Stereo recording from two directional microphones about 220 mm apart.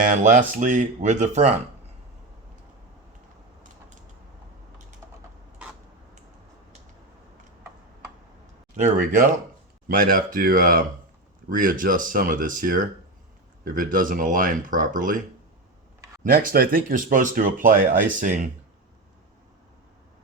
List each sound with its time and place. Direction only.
0.0 s speech: 35° right (ahead or behind)
9.0 s speech: 40° right (ahead or behind)
16.2 s speech: 40° right (ahead or behind)